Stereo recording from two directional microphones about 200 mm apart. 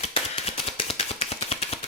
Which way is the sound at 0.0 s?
30° left (ahead or behind).